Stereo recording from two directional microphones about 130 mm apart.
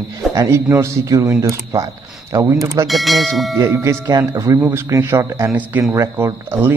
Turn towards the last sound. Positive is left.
turn(degrees=-20)  # may be behind; listen again after turning